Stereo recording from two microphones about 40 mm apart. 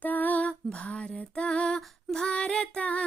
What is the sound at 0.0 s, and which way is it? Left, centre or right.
Female singing, left.